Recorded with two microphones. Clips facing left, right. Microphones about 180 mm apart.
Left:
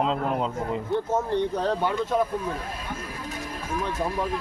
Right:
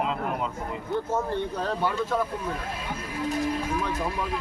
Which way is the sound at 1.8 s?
20° left (ahead or behind).